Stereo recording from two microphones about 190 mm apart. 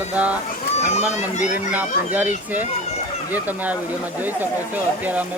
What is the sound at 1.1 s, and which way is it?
Speech, 40° left (ahead or behind).